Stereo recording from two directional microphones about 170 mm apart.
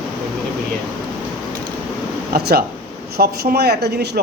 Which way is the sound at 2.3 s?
65° right (ahead or behind).